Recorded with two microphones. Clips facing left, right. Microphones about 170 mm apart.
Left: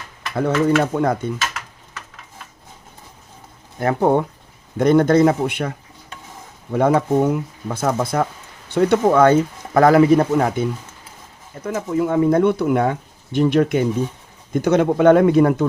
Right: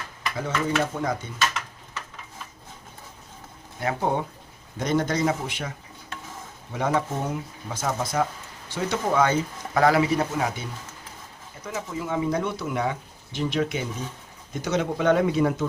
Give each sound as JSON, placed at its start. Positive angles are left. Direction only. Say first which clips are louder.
{"t": 0.3, "sound": "speech", "louder": "left 9 dB", "side_deg": 60}
{"t": 3.8, "sound": "speech", "louder": "left 9 dB", "side_deg": 50}